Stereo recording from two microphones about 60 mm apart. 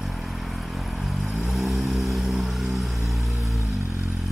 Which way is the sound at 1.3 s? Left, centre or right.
Centre.